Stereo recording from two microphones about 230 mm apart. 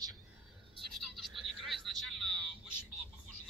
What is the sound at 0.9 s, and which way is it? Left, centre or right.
Toothbrush, centre.